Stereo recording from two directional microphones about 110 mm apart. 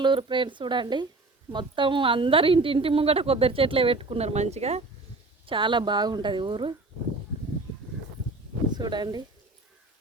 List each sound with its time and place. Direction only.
0.0 s a woman's voice: 45° right (ahead or behind); by 4.8 s 75° right (ahead or behind)
5.5 s a woman's voice: 45° right (ahead or behind)
8.7 s speech: 40° right (ahead or behind)